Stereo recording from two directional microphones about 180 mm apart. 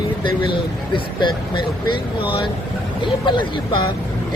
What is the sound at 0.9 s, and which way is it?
Speech, 25° left (ahead or behind).